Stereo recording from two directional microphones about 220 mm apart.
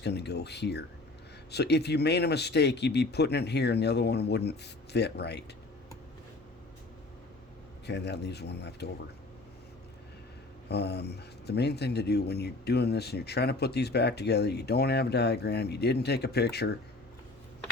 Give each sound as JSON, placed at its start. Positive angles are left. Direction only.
{"t": 0.0, "sound": "speech", "side_deg": 50}
{"t": 7.9, "sound": "speech", "side_deg": 50}
{"t": 10.7, "sound": "speech", "side_deg": 50}